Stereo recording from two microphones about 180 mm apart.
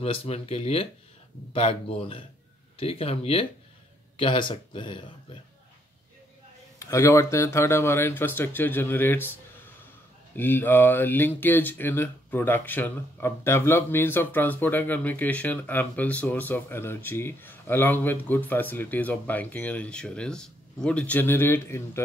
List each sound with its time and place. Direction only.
0.0 s speech: 35° left (ahead or behind)
6.9 s speech: 15° left (ahead or behind)
10.3 s speech: 10° left (ahead or behind)